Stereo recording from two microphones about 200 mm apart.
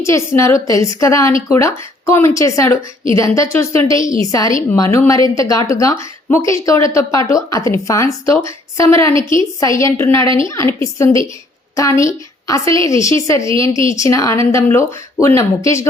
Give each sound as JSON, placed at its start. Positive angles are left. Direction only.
{"t": 0.0, "sound": "a woman's voice", "side_deg": 15}